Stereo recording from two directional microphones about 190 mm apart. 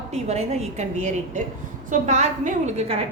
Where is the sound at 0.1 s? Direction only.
35° right (ahead or behind).